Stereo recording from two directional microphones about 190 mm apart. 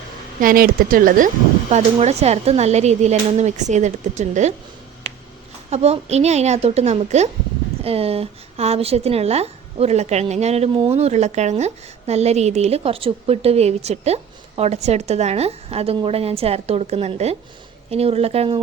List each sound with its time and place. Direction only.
0.3 s speech: 50° right (ahead or behind)
1.7 s a woman's voice: 35° right (ahead or behind)
5.7 s a woman's voice: 35° right (ahead or behind)